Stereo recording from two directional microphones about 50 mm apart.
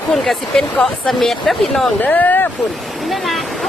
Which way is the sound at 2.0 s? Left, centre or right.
Left.